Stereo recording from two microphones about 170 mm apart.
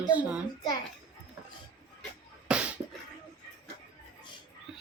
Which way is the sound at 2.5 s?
5° right (ahead or behind).